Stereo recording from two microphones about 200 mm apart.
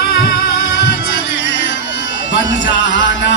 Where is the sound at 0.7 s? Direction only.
60° left (ahead or behind).